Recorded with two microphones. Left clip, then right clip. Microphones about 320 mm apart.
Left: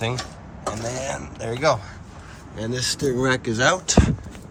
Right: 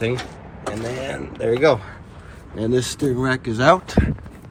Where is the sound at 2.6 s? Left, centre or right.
Centre.